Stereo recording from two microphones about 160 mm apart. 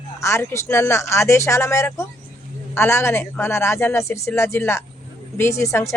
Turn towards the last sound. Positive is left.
turn(degrees=20)  # may be behind; listen again after turning